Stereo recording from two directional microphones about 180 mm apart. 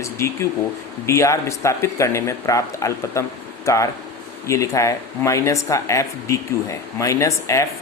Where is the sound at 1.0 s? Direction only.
15° left (ahead or behind).